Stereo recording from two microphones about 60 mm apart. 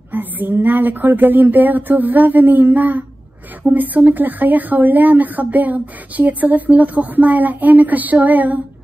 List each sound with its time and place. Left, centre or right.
0.1 s speech: right